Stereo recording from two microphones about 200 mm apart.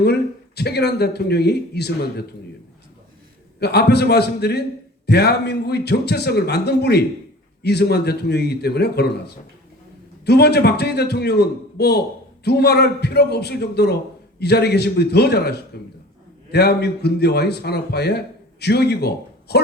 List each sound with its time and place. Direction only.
0.0 s speech: 55° left (ahead or behind)
3.6 s a man's voice: 55° left (ahead or behind)